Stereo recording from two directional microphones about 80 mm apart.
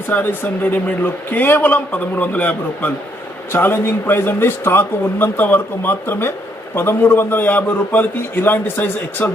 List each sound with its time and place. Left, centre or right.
0.1 s a man's voice: left